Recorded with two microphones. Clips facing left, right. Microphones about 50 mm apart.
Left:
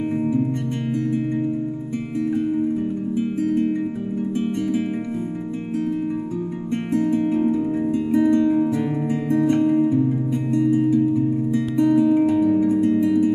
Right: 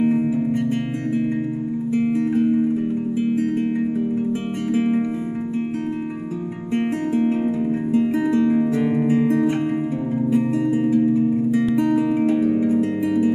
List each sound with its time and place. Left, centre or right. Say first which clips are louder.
8.2 s music: left 2 dB; centre
10.7 s music: even; right
12.3 s music: left 1 dB; right
12.5 s music: even; centre